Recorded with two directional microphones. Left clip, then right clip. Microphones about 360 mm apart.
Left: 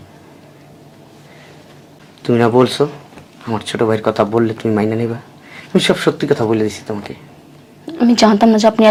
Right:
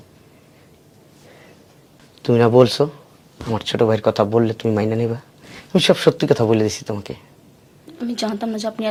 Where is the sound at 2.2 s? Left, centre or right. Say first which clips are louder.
Left 1 dB; right.